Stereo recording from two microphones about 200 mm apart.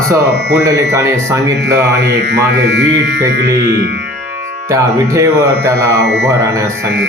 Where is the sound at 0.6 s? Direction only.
15° right (ahead or behind).